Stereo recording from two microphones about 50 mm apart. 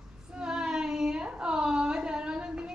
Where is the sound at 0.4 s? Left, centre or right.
Centre.